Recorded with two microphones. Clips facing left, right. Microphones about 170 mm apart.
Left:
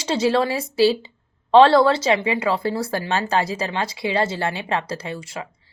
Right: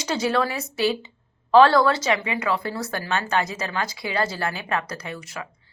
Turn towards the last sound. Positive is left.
turn(degrees=30)  # may be behind; listen again after turning